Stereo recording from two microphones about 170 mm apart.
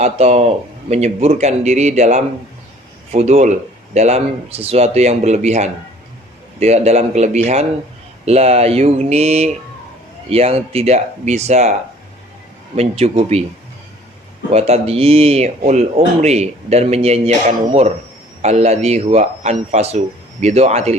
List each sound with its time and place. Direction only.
0.0 s speech: 40° right (ahead or behind)
12.7 s speech: 35° right (ahead or behind)
14.5 s speech: 35° right (ahead or behind)